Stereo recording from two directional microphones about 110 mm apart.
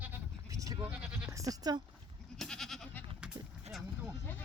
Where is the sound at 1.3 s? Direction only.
30° right (ahead or behind).